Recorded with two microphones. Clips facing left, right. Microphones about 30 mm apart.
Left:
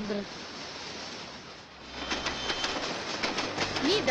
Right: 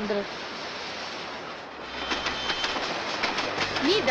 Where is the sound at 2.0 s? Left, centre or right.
Centre.